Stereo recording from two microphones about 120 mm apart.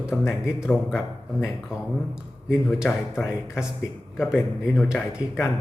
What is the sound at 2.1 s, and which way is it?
Speech, 5° right (ahead or behind).